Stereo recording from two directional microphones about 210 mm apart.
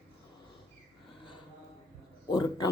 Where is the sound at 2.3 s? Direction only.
20° left (ahead or behind).